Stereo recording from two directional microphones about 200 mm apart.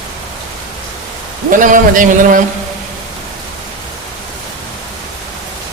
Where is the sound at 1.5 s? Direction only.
40° right (ahead or behind).